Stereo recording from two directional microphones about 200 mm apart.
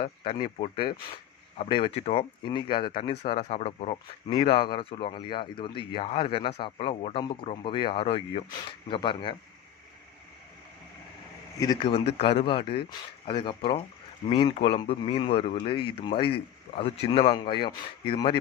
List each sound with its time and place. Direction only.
0.0 s speech: 25° left (ahead or behind)
11.6 s speech: 20° left (ahead or behind)